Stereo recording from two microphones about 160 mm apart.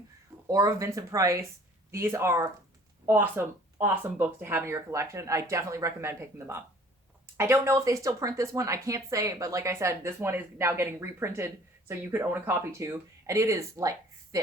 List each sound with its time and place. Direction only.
0.4 s speech: 20° right (ahead or behind)